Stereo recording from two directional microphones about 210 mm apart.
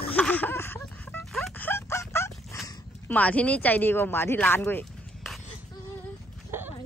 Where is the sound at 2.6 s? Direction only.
5° left (ahead or behind).